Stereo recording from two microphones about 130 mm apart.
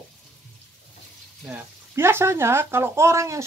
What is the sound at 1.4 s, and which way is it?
Speech, 10° right (ahead or behind).